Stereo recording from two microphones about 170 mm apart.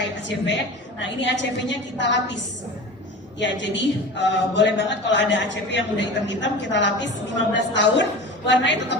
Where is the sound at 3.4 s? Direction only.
90° left.